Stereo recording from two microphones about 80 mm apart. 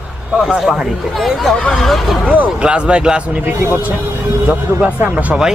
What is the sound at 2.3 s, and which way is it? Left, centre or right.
Speech, centre.